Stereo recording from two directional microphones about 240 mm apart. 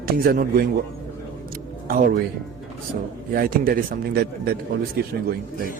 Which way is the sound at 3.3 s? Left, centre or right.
Right.